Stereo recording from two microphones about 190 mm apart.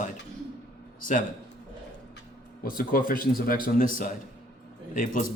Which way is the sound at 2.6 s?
50° left (ahead or behind).